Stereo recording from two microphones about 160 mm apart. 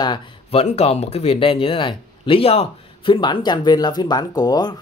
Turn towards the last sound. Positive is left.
turn(degrees=25)  # may be behind; listen again after turning